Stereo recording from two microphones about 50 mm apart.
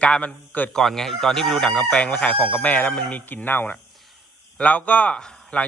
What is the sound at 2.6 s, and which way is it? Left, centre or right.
Speech, left.